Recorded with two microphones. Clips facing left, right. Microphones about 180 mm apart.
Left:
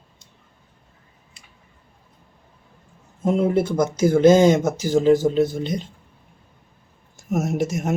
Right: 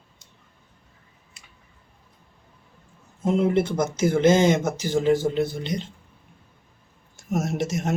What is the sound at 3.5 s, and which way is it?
Speech, 20° right (ahead or behind).